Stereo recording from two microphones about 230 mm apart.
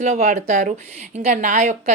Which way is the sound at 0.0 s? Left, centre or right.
Right.